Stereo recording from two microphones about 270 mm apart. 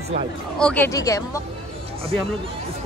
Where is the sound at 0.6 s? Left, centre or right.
Centre.